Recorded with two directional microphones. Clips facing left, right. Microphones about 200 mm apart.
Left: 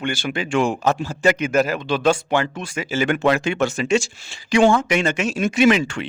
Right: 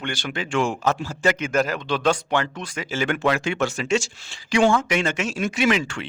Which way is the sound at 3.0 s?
20° left (ahead or behind).